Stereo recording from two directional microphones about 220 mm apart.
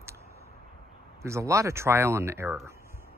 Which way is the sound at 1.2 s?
15° right (ahead or behind).